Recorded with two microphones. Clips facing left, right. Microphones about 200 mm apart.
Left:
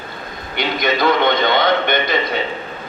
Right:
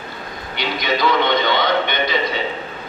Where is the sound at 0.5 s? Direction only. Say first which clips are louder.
Left 3 dB; 50° left (ahead or behind).